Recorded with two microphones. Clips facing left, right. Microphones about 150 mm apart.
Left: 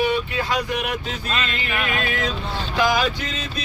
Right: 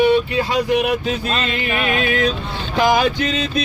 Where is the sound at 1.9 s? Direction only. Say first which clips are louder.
Right 8 dB; 65° right (ahead or behind).